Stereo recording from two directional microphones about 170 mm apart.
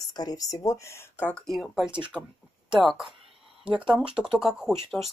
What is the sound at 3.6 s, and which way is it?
Speech, 30° right (ahead or behind).